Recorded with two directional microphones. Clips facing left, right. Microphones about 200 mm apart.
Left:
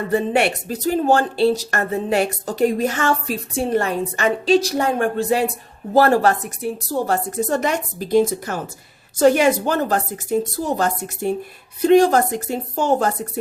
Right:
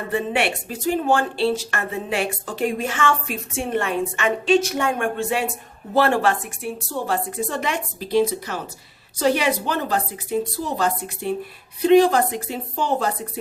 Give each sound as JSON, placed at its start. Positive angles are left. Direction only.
{"t": 0.1, "sound": "a woman's voice", "side_deg": 40}